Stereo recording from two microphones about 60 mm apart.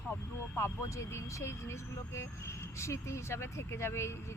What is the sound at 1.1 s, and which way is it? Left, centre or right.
Speech, left.